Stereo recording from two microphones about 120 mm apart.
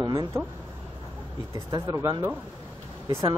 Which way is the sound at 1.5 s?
25° right (ahead or behind).